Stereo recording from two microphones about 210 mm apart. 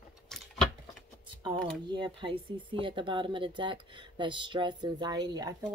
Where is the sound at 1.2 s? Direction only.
25° right (ahead or behind).